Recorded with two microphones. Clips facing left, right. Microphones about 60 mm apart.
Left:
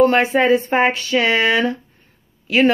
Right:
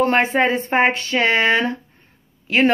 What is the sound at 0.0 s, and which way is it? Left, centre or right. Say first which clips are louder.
Speech: left 3 dB; right.